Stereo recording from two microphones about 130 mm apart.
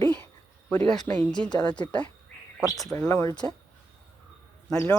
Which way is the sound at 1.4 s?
10° left (ahead or behind).